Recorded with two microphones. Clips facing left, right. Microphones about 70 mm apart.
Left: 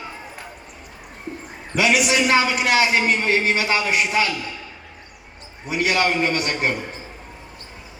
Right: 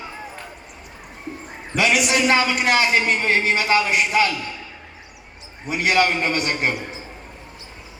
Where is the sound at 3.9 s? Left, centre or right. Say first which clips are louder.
Right 2 dB; right.